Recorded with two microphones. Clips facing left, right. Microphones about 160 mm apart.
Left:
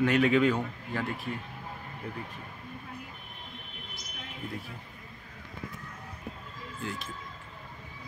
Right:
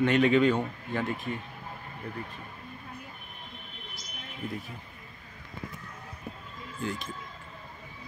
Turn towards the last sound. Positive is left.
turn(degrees=0)  # may be behind; listen again after turning